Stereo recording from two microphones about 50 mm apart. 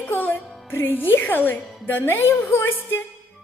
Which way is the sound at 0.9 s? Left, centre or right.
Left.